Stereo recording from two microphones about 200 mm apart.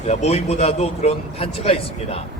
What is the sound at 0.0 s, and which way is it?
A man's voice, 35° left (ahead or behind).